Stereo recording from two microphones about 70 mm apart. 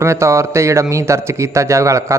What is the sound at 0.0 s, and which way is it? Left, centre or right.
Speech, right.